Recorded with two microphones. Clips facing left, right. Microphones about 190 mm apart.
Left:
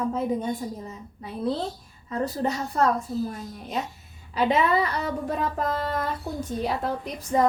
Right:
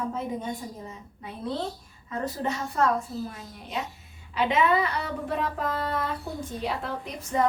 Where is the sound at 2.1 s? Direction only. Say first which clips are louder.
Left 3 dB; 35° left (ahead or behind).